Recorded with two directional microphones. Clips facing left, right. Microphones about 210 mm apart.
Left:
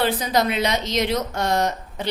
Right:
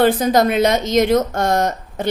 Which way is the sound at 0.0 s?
50° right (ahead or behind).